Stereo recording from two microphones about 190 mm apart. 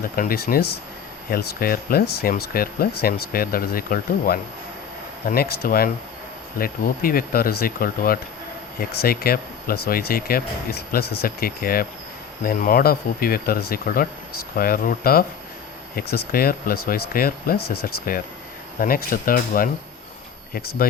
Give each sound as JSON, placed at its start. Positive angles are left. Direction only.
{"t": 0.2, "sound": "speech", "side_deg": 50}